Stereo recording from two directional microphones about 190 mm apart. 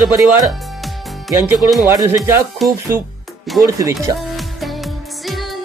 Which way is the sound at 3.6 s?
20° right (ahead or behind).